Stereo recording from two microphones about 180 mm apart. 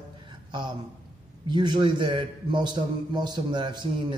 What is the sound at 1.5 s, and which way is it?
A man's voice, 25° right (ahead or behind).